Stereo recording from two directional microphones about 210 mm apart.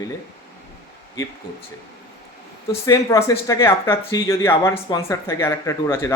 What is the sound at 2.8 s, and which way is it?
Speech, 15° left (ahead or behind).